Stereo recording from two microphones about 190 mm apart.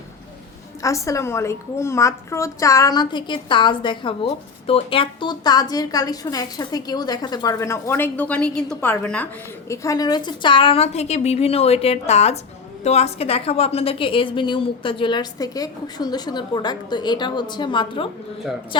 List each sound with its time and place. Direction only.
0.8 s a woman's voice: 15° left (ahead or behind)